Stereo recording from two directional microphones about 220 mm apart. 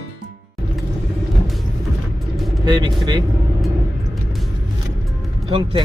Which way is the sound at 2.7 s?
20° right (ahead or behind).